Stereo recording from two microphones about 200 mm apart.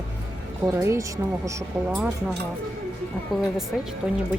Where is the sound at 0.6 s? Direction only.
15° right (ahead or behind).